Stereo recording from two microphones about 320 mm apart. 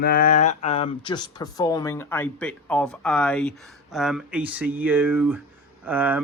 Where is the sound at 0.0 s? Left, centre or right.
Left.